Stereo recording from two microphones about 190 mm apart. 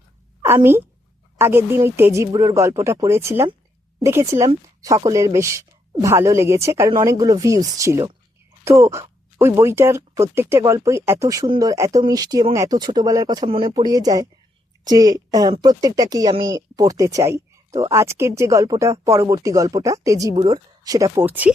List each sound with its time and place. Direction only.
0.4 s a woman's voice: 10° right (ahead or behind)